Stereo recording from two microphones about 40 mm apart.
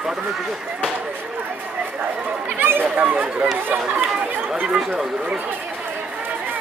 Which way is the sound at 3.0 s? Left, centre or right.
Right.